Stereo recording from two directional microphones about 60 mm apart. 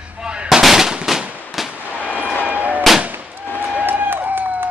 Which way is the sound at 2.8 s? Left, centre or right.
Centre.